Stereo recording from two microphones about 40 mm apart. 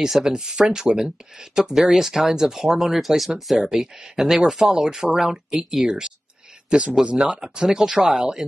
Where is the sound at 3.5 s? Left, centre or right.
Centre.